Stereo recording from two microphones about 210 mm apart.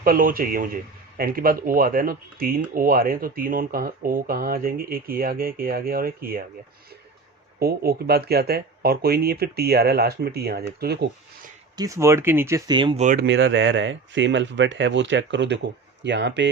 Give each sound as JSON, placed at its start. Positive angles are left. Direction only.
{"t": 0.0, "sound": "speech", "side_deg": -45}
{"t": 7.6, "sound": "speech", "side_deg": -45}
{"t": 11.8, "sound": "speech", "side_deg": -15}
{"t": 13.2, "sound": "speech", "side_deg": -60}